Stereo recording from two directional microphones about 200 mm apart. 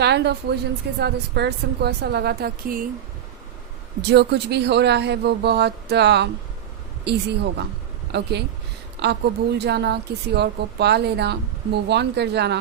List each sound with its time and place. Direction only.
0.0 s a woman's voice: 55° right (ahead or behind)
4.0 s a woman's voice: 55° right (ahead or behind)